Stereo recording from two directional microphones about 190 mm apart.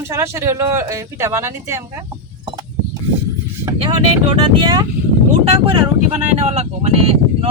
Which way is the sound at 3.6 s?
15° right (ahead or behind).